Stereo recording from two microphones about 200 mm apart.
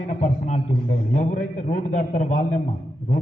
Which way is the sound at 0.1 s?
35° left (ahead or behind).